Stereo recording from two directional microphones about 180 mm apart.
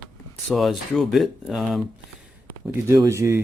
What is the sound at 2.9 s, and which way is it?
Speech, 15° right (ahead or behind).